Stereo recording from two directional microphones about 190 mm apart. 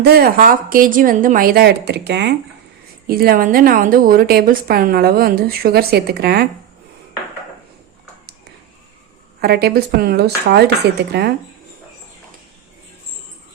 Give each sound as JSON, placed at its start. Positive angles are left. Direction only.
{"t": 0.0, "sound": "a woman's voice", "side_deg": -55}
{"t": 9.4, "sound": "speech", "side_deg": -55}